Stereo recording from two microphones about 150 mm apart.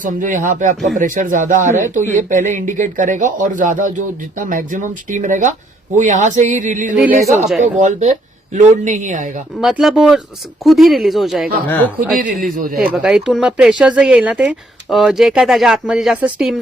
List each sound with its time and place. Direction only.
0.0 s speech: 60° right (ahead or behind)
6.9 s speech: 5° right (ahead or behind)
7.6 s speech: 55° right (ahead or behind)
9.6 s speech: 5° right (ahead or behind)
11.9 s speech: 70° right (ahead or behind)
12.8 s speech: 10° right (ahead or behind)